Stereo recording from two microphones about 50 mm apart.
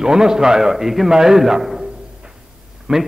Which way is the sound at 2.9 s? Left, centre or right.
Centre.